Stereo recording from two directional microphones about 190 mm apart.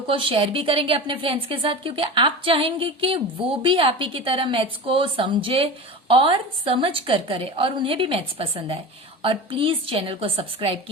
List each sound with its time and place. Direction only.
0.1 s a woman's voice: 30° right (ahead or behind)